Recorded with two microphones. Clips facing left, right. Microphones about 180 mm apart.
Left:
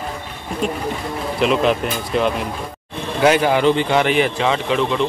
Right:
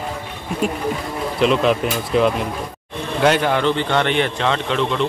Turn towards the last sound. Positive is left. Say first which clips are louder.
# left 1 dB
turn(degrees=5)  # may be behind; listen again after turning